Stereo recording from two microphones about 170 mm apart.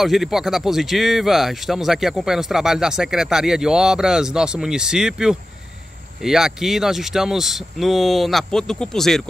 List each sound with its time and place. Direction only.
0.0 s speech: centre (ahead or behind)